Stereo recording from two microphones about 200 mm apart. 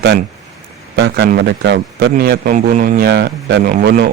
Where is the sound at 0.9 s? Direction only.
55° right (ahead or behind).